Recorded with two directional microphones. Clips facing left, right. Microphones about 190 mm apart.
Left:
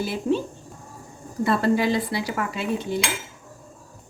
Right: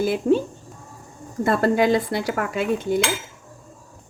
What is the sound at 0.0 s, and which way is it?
Speech, 50° right (ahead or behind).